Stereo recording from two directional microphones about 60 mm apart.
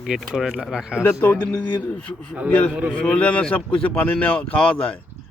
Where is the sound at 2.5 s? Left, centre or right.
Left.